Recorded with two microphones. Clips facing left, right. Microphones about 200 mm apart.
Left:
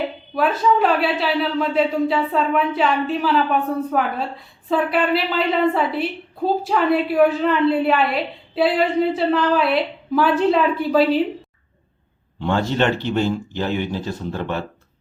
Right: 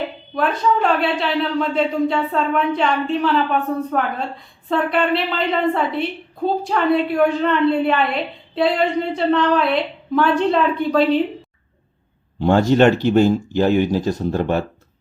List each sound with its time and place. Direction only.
0.3 s a woman's voice: 5° left (ahead or behind)
12.4 s speech: 45° right (ahead or behind)